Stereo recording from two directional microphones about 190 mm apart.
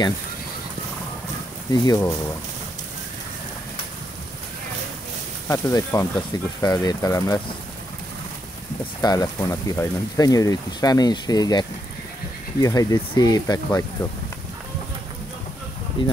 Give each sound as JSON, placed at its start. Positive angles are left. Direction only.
{"t": 1.7, "sound": "speech", "side_deg": 20}
{"t": 5.5, "sound": "speech", "side_deg": 20}
{"t": 9.0, "sound": "speech", "side_deg": 20}